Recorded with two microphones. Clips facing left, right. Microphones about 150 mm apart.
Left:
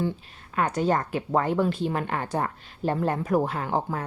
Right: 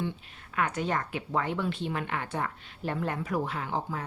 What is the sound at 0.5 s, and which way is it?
Speech, 35° left (ahead or behind).